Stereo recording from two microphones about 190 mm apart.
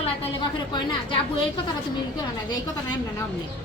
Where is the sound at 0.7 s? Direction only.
25° left (ahead or behind).